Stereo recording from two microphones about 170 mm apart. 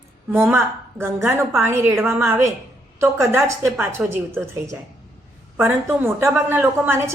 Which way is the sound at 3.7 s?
5° right (ahead or behind).